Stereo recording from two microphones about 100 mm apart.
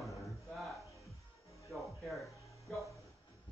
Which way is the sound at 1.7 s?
Centre (ahead or behind).